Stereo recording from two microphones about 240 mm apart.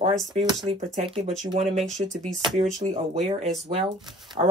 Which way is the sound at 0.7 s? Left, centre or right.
Right.